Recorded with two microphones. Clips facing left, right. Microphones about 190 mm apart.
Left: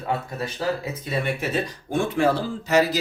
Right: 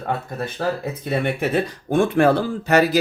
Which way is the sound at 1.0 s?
55° right (ahead or behind).